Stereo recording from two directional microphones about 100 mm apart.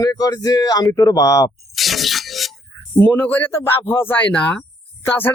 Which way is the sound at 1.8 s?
Centre (ahead or behind).